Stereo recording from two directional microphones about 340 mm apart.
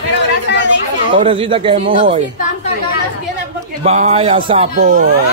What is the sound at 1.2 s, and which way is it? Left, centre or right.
Speech, centre.